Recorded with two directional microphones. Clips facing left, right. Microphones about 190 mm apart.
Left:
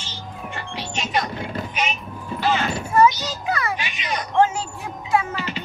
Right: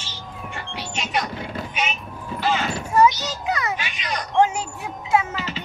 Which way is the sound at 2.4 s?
Centre (ahead or behind).